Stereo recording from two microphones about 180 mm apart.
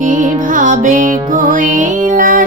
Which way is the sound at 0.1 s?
45° right (ahead or behind).